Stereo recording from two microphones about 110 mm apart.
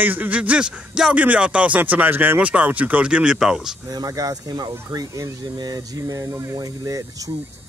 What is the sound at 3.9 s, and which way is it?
Speech, 35° right (ahead or behind).